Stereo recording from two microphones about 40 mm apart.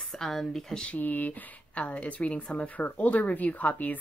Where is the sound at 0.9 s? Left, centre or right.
Left.